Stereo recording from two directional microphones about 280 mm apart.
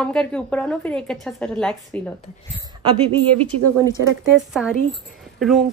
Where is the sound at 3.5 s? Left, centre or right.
Right.